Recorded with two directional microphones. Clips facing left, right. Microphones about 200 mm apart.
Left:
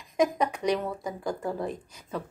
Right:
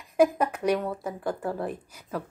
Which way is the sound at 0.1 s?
5° right (ahead or behind).